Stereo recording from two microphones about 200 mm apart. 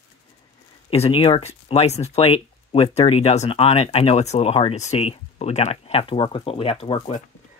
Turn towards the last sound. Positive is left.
turn(degrees=30)  # may be behind; listen again after turning